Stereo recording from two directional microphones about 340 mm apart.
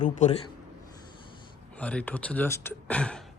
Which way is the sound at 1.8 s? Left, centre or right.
Centre.